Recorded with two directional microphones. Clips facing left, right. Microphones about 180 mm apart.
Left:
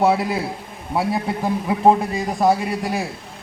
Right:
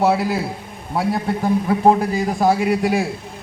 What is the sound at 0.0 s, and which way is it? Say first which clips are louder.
A man's voice: right 1 dB; centre (ahead or behind).